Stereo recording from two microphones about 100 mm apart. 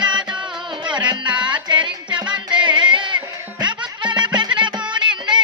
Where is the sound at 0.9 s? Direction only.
50° right (ahead or behind).